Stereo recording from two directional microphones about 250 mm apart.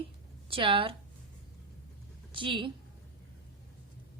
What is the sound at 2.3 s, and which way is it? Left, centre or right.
Speech, centre.